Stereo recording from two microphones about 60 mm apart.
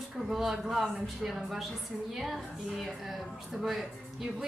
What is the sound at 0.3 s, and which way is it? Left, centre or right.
Speech, centre.